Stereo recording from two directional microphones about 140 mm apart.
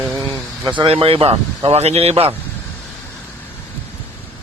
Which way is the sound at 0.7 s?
35° right (ahead or behind).